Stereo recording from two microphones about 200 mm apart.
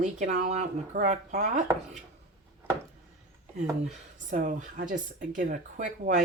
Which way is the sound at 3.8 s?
40° right (ahead or behind).